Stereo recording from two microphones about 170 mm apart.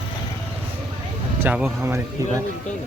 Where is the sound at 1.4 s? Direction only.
10° right (ahead or behind).